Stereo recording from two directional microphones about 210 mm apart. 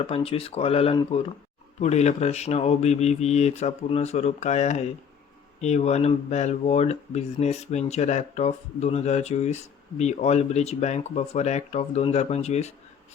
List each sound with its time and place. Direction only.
0.0 s speech: 25° left (ahead or behind)